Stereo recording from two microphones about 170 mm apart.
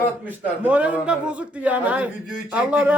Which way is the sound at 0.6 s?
10° right (ahead or behind).